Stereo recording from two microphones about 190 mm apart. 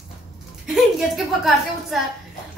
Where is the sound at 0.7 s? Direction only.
Centre (ahead or behind).